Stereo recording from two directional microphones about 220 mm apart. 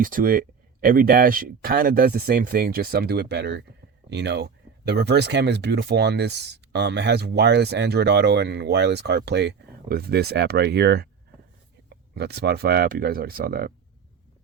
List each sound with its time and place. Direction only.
0.0 s speech: 40° right (ahead or behind)
12.1 s speech: 50° right (ahead or behind)